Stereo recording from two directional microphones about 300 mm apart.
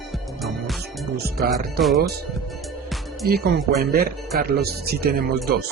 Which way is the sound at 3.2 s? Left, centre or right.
Right.